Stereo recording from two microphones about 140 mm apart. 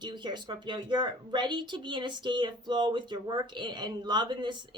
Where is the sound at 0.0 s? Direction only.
30° right (ahead or behind).